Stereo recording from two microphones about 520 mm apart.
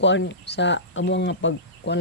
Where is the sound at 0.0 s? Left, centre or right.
Left.